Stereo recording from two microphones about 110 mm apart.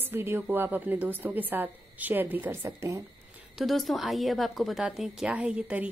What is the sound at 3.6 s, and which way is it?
A woman's voice, centre (ahead or behind).